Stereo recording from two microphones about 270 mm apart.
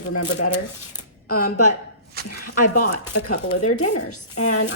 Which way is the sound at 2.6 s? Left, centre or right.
Left.